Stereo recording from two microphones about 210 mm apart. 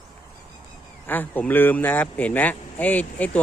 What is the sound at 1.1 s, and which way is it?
Speech, 10° left (ahead or behind).